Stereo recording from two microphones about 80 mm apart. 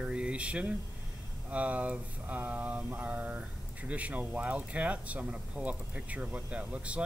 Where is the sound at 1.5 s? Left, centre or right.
Centre.